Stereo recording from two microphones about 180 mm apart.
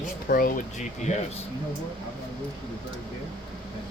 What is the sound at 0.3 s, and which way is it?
Speech, 50° left (ahead or behind).